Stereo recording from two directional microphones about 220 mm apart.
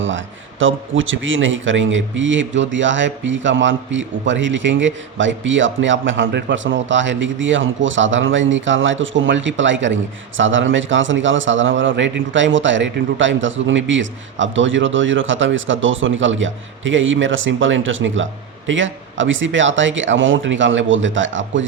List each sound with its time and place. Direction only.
0.6 s speech: 60° right (ahead or behind)